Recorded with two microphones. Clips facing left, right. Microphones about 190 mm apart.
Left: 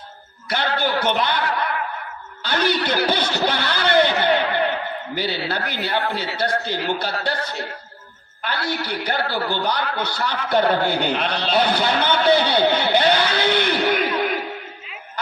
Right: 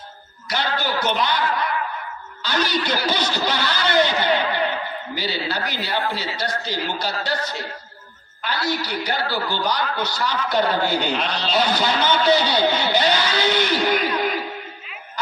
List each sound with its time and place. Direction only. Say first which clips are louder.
0.5 s chuckle: left 2 dB; 55° left (ahead or behind)
2.4 s a sound: left 2 dB; 55° left (ahead or behind)
5.1 s a man's voice: left 1 dB; 55° left (ahead or behind)